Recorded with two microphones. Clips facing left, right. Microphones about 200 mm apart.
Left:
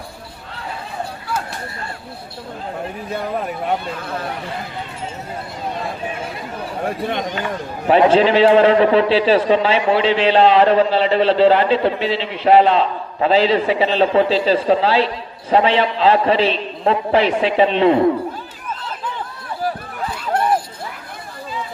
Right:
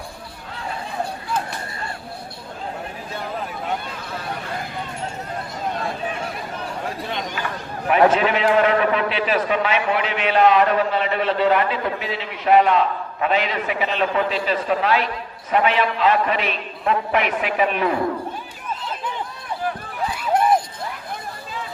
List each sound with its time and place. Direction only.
7.9 s a man's voice: 30° left (ahead or behind)